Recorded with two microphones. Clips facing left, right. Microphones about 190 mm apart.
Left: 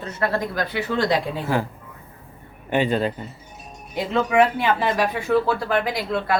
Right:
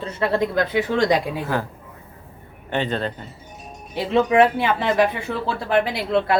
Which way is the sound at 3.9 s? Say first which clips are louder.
Right 2 dB; 30° right (ahead or behind).